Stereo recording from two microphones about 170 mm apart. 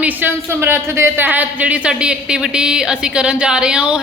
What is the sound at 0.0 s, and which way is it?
Speech, 10° right (ahead or behind).